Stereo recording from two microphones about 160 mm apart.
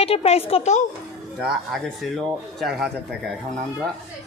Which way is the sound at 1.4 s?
Centre (ahead or behind).